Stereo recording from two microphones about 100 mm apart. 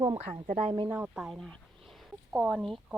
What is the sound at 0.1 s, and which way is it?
Speech, 80° right.